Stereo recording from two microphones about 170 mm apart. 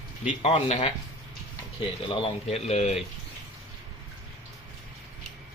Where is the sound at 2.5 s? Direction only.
40° left (ahead or behind).